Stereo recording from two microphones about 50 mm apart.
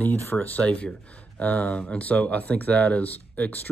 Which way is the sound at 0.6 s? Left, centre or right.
Left.